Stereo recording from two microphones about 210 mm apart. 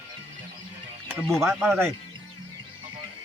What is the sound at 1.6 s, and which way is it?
Speech, 10° right (ahead or behind).